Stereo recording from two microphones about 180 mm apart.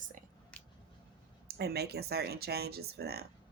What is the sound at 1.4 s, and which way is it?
Speech, 65° right (ahead or behind).